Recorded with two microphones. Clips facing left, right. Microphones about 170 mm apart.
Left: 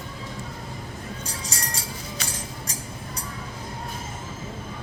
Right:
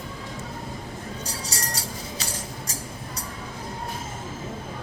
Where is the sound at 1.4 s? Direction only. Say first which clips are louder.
Right 1 dB; 35° right (ahead or behind).